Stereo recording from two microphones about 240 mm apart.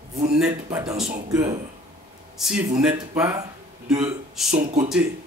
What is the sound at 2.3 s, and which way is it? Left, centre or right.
A man's voice, centre.